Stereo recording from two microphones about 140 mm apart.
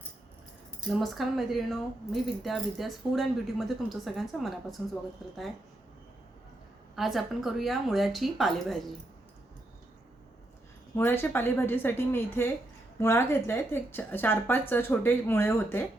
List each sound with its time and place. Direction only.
0.9 s speech: centre (ahead or behind)
6.9 s speech: centre (ahead or behind)
10.9 s speech: 15° left (ahead or behind)